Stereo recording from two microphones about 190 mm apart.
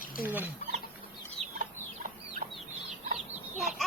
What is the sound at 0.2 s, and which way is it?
Speech, 10° right (ahead or behind).